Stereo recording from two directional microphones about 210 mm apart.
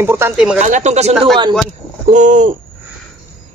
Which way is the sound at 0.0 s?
10° right (ahead or behind).